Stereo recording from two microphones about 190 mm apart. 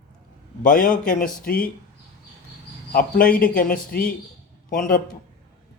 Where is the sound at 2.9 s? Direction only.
50° left (ahead or behind).